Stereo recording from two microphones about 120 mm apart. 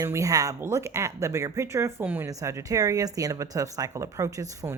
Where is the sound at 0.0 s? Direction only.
25° right (ahead or behind).